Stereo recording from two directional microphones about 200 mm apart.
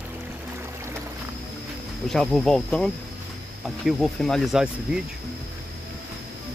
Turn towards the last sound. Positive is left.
turn(degrees=0)  # may be behind; listen again after turning